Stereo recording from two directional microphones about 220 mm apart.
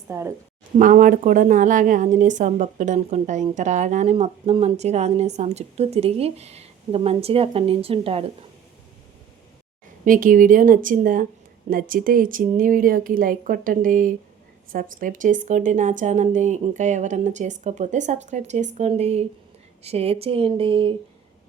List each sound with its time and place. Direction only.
0.1 s a woman's voice: 10° right (ahead or behind)
0.8 s a woman's voice: 35° right (ahead or behind)
10.0 s a woman's voice: 35° right (ahead or behind)